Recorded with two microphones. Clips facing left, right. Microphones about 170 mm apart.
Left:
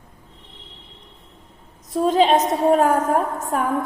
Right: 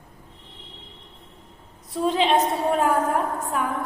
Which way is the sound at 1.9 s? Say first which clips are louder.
Left 4 dB; 40° left (ahead or behind).